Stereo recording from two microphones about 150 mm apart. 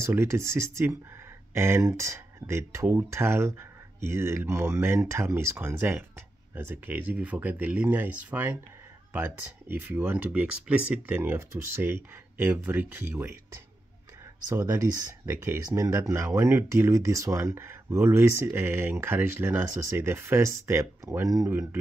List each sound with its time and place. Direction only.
0.0 s speech: 15° right (ahead or behind)
14.5 s speech: 15° right (ahead or behind)